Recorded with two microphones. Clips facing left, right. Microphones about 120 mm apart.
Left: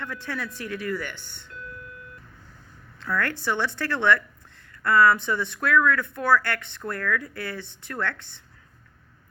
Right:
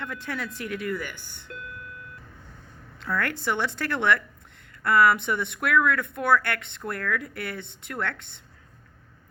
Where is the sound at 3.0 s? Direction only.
20° right (ahead or behind).